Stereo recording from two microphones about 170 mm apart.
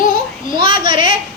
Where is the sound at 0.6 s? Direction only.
30° right (ahead or behind).